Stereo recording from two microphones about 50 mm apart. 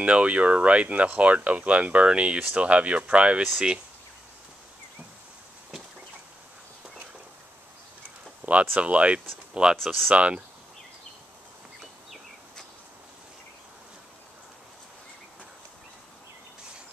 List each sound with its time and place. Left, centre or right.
0.0 s speech: right
8.4 s a sound: right
8.7 s speech: right